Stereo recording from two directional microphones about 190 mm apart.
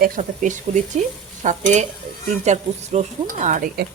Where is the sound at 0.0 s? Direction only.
40° right (ahead or behind).